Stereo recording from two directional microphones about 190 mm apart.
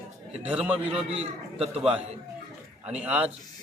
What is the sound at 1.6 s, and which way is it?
Speech, 30° right (ahead or behind).